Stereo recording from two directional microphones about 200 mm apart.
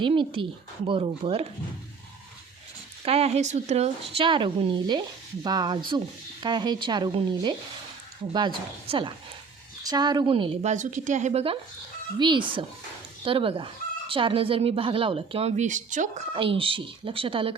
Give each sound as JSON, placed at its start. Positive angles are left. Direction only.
{"t": 0.0, "sound": "speech", "side_deg": -25}
{"t": 3.0, "sound": "speech", "side_deg": -30}
{"t": 16.3, "sound": "speech", "side_deg": -25}